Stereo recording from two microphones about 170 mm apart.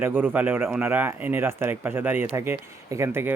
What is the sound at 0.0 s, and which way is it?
Speech, 10° right (ahead or behind).